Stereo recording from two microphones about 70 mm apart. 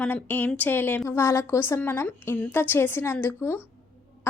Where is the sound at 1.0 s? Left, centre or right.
Left.